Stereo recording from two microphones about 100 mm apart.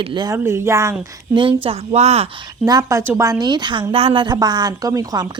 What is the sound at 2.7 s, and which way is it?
Speech, 40° right (ahead or behind).